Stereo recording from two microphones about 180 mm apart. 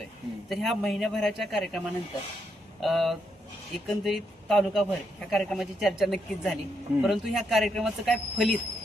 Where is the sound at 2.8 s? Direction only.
Centre (ahead or behind).